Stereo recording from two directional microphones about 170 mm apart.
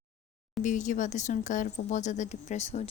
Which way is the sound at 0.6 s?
45° left (ahead or behind).